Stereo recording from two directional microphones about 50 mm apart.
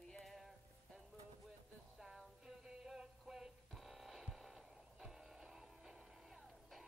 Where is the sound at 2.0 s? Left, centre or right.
Centre.